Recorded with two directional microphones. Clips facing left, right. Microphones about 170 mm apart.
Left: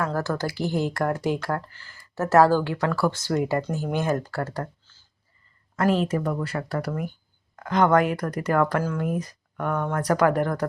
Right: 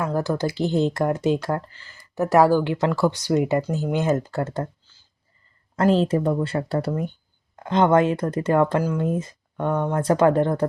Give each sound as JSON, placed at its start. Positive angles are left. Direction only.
{"t": 0.0, "sound": "speech", "side_deg": -15}